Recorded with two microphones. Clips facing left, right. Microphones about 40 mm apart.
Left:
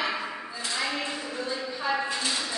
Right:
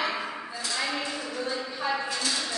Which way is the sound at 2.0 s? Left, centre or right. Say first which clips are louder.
Left 1 dB; left.